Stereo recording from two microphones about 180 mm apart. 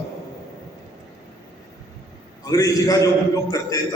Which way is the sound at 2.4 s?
20° left (ahead or behind).